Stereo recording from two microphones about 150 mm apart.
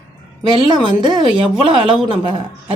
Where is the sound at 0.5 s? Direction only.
35° right (ahead or behind).